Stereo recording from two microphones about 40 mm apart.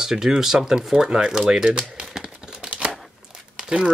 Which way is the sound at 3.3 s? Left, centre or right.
Centre.